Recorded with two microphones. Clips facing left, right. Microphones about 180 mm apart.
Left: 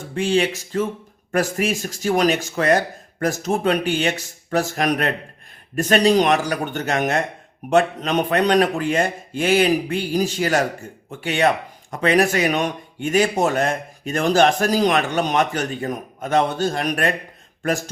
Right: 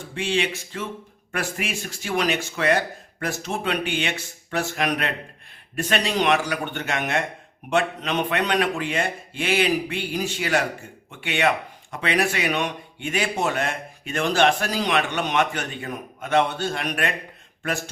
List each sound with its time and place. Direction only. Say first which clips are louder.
0.1 s speech: left 6 dB; 40° left (ahead or behind)